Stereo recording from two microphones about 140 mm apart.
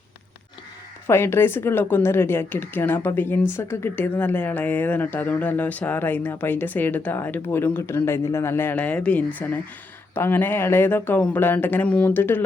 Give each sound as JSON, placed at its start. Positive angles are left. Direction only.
{"t": 1.0, "sound": "speech", "side_deg": 15}